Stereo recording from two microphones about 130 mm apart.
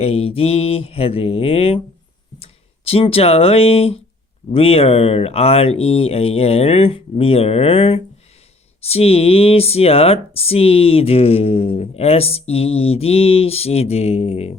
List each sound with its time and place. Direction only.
0.0 s speech: 50° left (ahead or behind)